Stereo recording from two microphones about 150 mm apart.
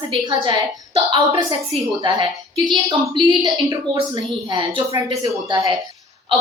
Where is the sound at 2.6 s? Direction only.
30° right (ahead or behind).